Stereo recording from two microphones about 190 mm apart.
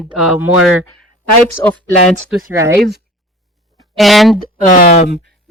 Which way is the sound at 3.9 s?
Centre (ahead or behind).